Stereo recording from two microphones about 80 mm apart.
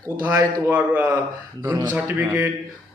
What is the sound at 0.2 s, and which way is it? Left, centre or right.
Speech, right.